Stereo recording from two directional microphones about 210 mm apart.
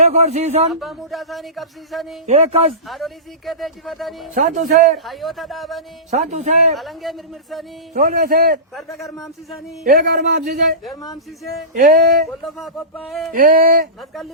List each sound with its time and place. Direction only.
0.0 s speech: 30° right (ahead or behind)
0.7 s speech: centre (ahead or behind)
2.2 s speech: 30° right (ahead or behind)
2.8 s speech: centre (ahead or behind)
4.4 s speech: 35° right (ahead or behind)
5.0 s speech: centre (ahead or behind)
6.1 s speech: 35° right (ahead or behind)
6.7 s speech: centre (ahead or behind)
7.9 s a man's voice: 45° right (ahead or behind)
8.7 s speech: centre (ahead or behind)
9.8 s a man's voice: 45° right (ahead or behind)
12.5 s speech: centre (ahead or behind)
13.3 s speech: 40° right (ahead or behind)